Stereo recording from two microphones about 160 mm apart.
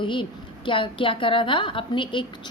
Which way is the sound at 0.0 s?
30° left (ahead or behind).